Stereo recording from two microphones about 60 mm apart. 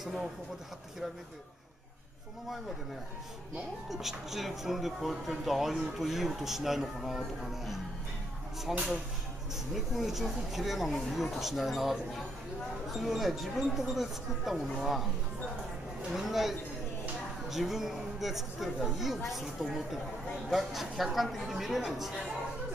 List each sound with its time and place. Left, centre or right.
3.9 s speech: centre
16.1 s speech: centre